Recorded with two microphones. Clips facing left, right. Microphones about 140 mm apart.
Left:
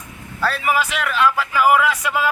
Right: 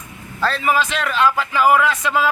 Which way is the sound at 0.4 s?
10° left (ahead or behind).